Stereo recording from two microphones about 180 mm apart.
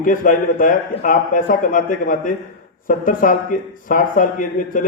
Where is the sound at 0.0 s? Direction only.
45° left (ahead or behind).